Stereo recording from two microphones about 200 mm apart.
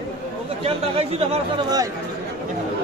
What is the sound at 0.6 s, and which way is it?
Speech, 30° right (ahead or behind).